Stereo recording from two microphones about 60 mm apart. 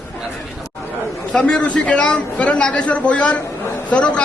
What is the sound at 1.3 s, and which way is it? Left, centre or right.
A man's voice, centre.